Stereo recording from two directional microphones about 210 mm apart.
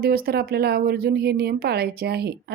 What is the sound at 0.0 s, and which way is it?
Speech, 45° right (ahead or behind).